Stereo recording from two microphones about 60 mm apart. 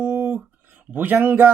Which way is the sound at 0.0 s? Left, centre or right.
Right.